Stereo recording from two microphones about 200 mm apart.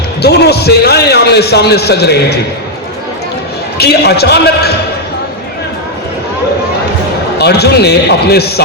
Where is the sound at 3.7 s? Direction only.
55° left (ahead or behind).